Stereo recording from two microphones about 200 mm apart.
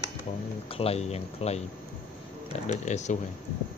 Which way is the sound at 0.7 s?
30° left (ahead or behind).